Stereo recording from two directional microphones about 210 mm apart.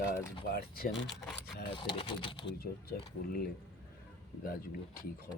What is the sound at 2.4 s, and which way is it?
Speech, 45° left (ahead or behind).